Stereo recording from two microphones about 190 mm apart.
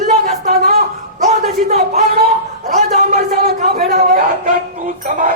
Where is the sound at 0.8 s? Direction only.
35° right (ahead or behind).